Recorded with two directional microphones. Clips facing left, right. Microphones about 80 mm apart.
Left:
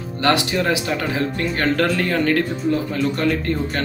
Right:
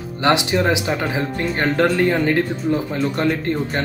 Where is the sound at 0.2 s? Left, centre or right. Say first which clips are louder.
Right 2 dB; right.